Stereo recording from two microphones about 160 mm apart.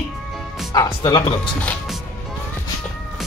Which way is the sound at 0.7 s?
25° left (ahead or behind).